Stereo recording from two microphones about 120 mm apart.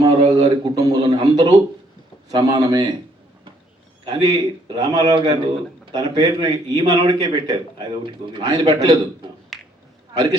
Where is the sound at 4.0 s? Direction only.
35° right (ahead or behind).